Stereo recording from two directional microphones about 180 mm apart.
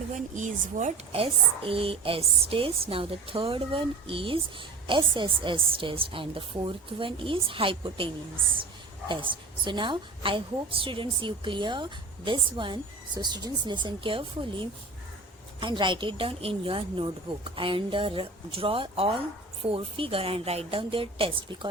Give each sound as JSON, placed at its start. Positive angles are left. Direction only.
{"t": 0.1, "sound": "a woman's voice", "side_deg": -45}